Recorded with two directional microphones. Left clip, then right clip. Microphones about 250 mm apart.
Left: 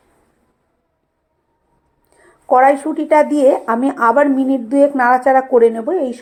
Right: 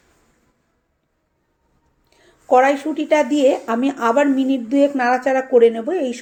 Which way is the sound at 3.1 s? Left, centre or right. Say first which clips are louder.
Left 4 dB; centre.